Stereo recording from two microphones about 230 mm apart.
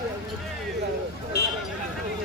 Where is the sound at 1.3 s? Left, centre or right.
Left.